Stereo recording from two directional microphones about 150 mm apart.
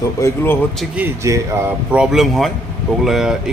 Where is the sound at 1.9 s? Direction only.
5° right (ahead or behind).